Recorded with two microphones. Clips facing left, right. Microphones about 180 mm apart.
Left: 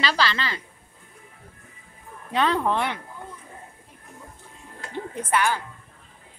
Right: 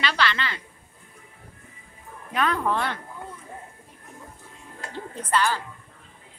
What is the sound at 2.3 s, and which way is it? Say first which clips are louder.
Speech: left 2 dB; 30° left (ahead or behind).